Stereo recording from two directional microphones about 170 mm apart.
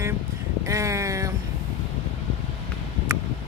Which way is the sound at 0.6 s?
15° right (ahead or behind).